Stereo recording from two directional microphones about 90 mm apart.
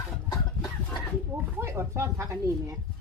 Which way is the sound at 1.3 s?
25° right (ahead or behind).